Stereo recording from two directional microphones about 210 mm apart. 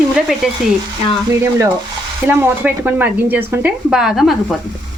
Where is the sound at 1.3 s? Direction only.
15° right (ahead or behind).